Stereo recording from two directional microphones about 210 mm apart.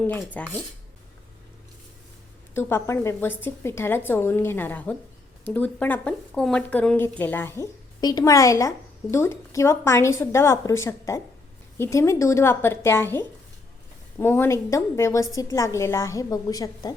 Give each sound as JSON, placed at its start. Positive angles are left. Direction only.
{"t": 0.0, "sound": "speech", "side_deg": 5}
{"t": 2.6, "sound": "speech", "side_deg": 10}